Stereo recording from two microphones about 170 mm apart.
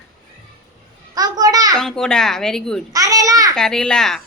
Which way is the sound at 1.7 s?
5° left (ahead or behind).